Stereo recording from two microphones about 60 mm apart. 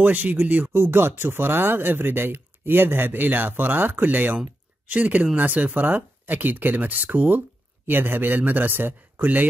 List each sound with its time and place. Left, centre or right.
0.0 s speech: right
0.7 s speech: right